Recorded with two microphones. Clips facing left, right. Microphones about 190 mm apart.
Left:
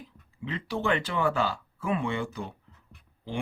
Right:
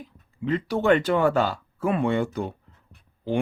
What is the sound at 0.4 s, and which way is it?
Speech, 45° right (ahead or behind).